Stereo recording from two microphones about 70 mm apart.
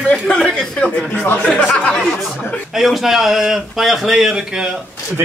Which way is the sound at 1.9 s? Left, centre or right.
Centre.